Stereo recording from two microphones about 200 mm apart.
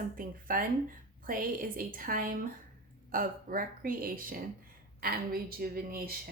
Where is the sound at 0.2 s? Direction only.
45° right (ahead or behind).